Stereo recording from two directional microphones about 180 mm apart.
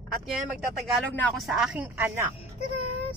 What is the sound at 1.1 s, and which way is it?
Speech, 10° left (ahead or behind).